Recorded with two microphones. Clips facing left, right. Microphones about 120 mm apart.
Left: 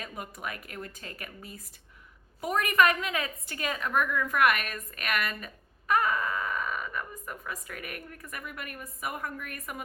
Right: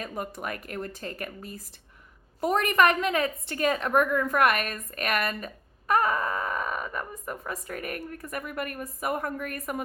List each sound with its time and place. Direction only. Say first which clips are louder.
0.0 s speech: right 5 dB; 45° right (ahead or behind)
2.9 s speech: right 6 dB; 35° right (ahead or behind)